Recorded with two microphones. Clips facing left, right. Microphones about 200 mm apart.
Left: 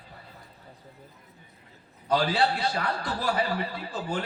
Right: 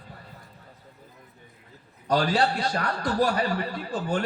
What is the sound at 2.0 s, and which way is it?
A man's voice, 45° right (ahead or behind).